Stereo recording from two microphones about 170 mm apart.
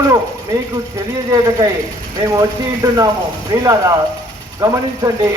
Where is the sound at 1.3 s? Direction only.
20° right (ahead or behind).